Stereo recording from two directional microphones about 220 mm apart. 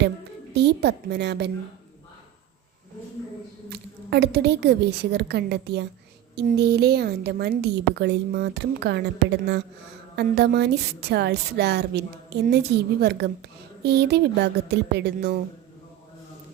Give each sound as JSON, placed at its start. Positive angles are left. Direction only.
{"t": 0.5, "sound": "a woman's voice", "side_deg": -50}
{"t": 3.7, "sound": "a woman's voice", "side_deg": -45}
{"t": 10.2, "sound": "a woman's voice", "side_deg": -50}